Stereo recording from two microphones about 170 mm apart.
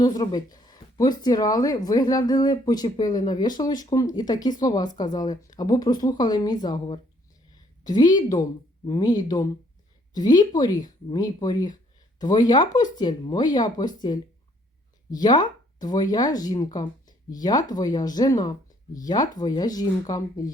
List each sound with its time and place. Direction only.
0.0 s a woman's voice: 25° left (ahead or behind)